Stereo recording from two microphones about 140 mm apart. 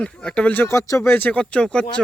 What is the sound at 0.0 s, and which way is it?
Speech, 5° left (ahead or behind).